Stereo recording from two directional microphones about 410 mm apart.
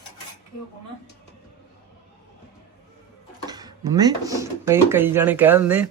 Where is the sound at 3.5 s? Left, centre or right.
Centre.